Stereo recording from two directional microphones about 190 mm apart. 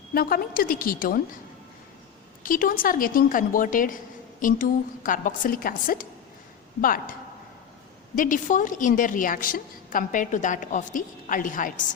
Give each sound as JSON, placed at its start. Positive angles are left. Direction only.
{"t": 0.1, "sound": "a woman's voice", "side_deg": 50}
{"t": 2.4, "sound": "a woman's voice", "side_deg": 45}